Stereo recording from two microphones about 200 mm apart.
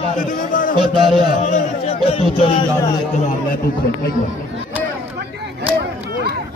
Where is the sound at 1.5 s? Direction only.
30° left (ahead or behind).